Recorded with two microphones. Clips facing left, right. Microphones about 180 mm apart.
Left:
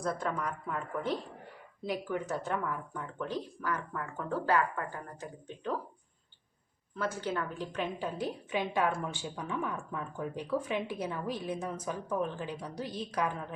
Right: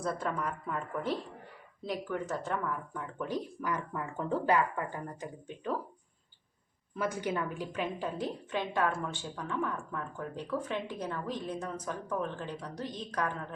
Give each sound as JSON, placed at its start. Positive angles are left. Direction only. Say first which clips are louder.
{"t": 0.0, "sound": "speech", "louder": "even", "side_deg": -5}
{"t": 3.2, "sound": "speech", "louder": "right 1 dB", "side_deg": -15}
{"t": 6.9, "sound": "speech", "louder": "right 1 dB", "side_deg": -15}